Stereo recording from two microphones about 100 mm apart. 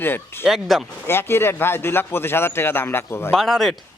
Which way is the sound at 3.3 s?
5° left (ahead or behind).